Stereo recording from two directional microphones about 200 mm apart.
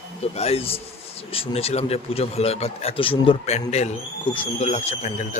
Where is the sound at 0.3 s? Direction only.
30° left (ahead or behind).